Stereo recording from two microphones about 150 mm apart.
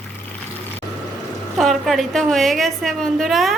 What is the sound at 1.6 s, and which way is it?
A woman's voice, centre (ahead or behind).